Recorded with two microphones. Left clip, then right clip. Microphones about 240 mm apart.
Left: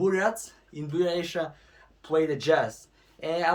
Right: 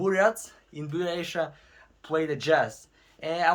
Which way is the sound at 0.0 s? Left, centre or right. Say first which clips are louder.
Right 2 dB; centre.